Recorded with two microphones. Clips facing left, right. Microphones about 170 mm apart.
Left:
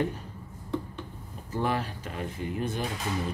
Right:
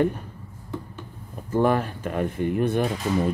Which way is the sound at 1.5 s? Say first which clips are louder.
Right 8 dB; 50° right (ahead or behind).